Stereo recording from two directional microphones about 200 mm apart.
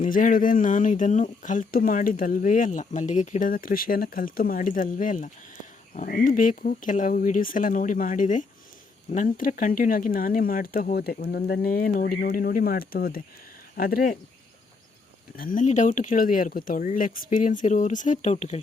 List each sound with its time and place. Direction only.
0.0 s speech: 40° left (ahead or behind)
15.4 s speech: 40° left (ahead or behind)